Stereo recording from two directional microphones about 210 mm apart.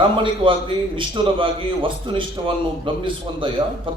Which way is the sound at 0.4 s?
25° right (ahead or behind).